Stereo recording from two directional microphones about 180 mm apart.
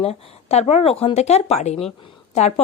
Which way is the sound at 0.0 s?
35° left (ahead or behind).